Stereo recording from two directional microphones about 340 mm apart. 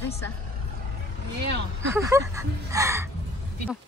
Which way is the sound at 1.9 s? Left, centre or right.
Centre.